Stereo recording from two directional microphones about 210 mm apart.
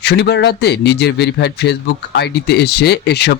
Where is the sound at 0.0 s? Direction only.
55° left (ahead or behind).